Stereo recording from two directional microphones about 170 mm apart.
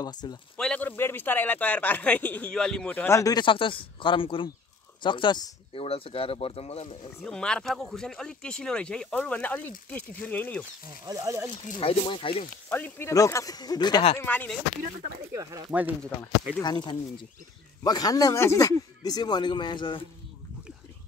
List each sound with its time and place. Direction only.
0.0 s speech: 25° left (ahead or behind)
0.6 s speech: 5° left (ahead or behind); by 7.1 s 35° left (ahead or behind)
7.2 s speech: 5° left (ahead or behind)
11.1 s speech: 15° right (ahead or behind)
11.6 s speech: 35° left (ahead or behind)
12.6 s speech: 10° left (ahead or behind); by 14.1 s 25° left (ahead or behind)
14.1 s speech: 10° left (ahead or behind)
15.3 s speech: 20° right (ahead or behind)
16.6 s speech: 25° left (ahead or behind)